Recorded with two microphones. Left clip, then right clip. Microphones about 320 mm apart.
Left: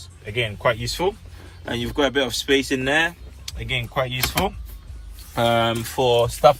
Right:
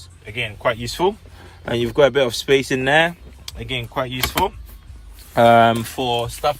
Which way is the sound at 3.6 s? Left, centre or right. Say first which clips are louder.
Even; centre.